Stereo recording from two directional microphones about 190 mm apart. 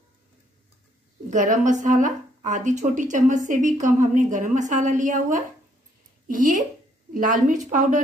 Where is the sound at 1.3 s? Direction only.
40° right (ahead or behind).